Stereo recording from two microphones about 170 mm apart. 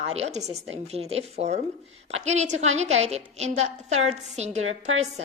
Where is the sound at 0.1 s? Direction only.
40° right (ahead or behind).